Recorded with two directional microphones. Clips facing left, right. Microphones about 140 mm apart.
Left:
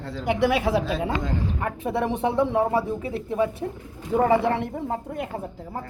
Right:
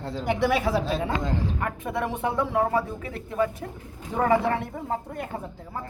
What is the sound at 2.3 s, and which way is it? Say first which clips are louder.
Speech: left 1 dB; 30° left (ahead or behind).